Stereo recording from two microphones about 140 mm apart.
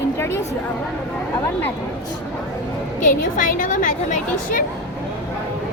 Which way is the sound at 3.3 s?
70° left (ahead or behind).